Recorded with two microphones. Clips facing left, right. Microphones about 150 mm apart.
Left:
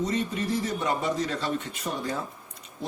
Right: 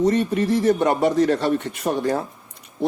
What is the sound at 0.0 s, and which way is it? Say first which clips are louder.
A man's voice: right 9 dB; 65° right (ahead or behind).